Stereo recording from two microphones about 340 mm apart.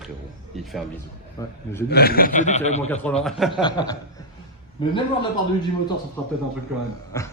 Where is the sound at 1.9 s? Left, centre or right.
Left.